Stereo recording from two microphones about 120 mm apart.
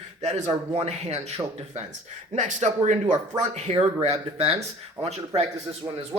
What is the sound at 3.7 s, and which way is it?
Speech, 60° right (ahead or behind).